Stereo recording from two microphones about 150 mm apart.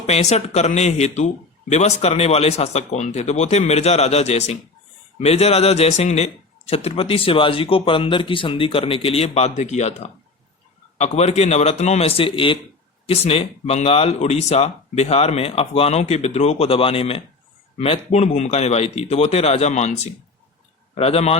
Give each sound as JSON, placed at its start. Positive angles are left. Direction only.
{"t": 0.1, "sound": "a man's voice", "side_deg": 50}